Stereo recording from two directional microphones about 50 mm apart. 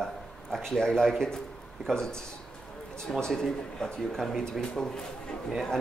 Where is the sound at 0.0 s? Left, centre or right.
Centre.